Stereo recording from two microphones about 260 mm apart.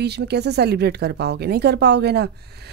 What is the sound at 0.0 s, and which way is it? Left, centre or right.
Speech, right.